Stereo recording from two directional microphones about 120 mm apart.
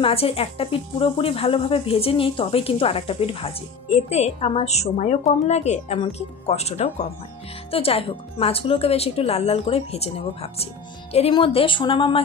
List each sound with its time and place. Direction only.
0.0 s speech: 55° left (ahead or behind)
7.7 s speech: 50° left (ahead or behind)